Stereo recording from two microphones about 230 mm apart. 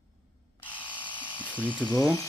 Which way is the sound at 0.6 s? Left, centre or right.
Left.